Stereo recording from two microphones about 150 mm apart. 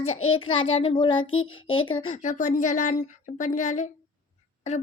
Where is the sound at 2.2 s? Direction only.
55° left (ahead or behind).